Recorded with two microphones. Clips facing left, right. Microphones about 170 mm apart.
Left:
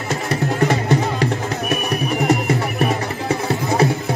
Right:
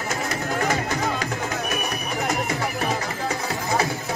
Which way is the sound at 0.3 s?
35° left (ahead or behind).